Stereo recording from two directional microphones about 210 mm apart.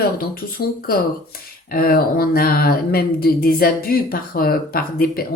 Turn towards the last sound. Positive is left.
turn(degrees=45)  # may be behind; listen again after turning